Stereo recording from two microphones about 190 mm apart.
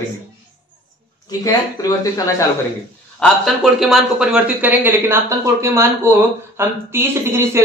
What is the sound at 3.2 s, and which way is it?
Speech, centre (ahead or behind).